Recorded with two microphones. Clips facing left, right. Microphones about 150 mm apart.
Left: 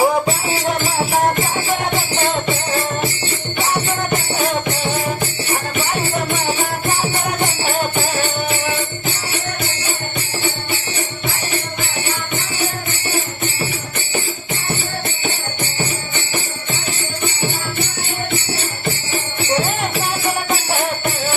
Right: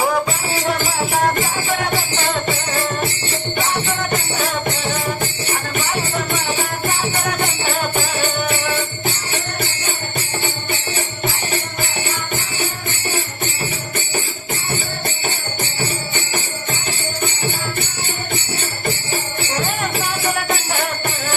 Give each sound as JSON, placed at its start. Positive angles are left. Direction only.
{"t": 0.0, "sound": "music", "side_deg": 25}